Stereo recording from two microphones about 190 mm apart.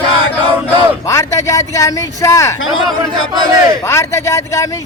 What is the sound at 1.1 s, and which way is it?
A man's voice, 15° left (ahead or behind).